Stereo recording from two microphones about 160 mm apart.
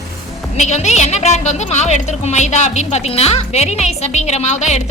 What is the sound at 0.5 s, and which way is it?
A woman's voice, 45° left (ahead or behind).